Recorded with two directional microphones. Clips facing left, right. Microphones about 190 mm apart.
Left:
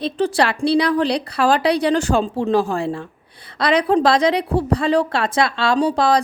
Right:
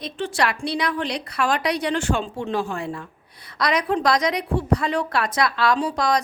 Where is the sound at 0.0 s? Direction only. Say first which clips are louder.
Left 6 dB; 35° left (ahead or behind).